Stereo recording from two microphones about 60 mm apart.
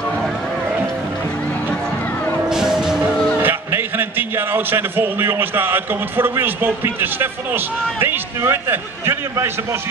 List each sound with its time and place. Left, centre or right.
2.5 s music: centre
3.3 s a man's voice: right